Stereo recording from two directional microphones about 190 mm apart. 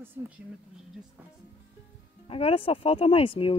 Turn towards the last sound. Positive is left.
turn(degrees=30)  # may be behind; listen again after turning